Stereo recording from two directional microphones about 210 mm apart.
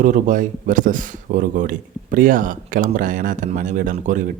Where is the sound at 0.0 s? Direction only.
35° right (ahead or behind).